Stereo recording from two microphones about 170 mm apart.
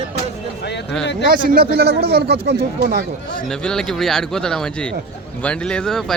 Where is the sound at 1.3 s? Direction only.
60° right (ahead or behind).